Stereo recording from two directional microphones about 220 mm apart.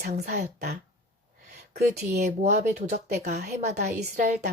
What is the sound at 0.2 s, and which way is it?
Speech, 45° right (ahead or behind).